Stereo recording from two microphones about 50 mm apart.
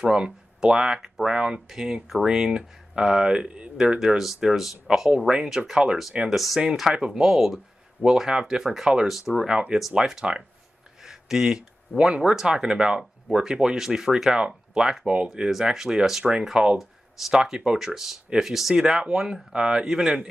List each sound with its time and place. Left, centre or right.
0.0 s speech: centre
11.0 s a sound: centre
12.3 s speech: centre